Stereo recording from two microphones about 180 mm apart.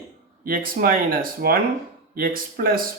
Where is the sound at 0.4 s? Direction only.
50° right (ahead or behind).